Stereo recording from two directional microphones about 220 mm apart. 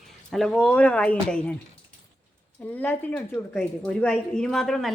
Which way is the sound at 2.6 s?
10° left (ahead or behind).